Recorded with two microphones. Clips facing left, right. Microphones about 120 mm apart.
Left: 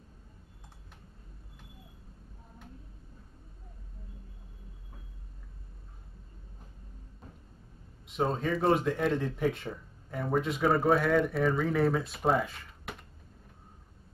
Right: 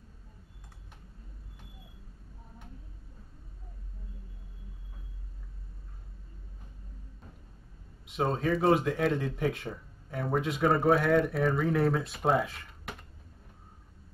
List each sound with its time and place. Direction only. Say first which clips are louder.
8.0 s speech: right 1 dB; centre (ahead or behind)